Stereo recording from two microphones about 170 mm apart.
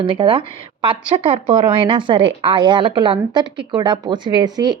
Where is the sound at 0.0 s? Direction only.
30° right (ahead or behind).